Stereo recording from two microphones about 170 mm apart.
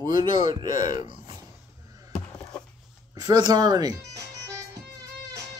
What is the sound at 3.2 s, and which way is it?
Speech, 25° right (ahead or behind).